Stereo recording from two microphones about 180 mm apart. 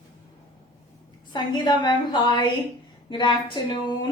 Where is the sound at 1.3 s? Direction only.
25° left (ahead or behind).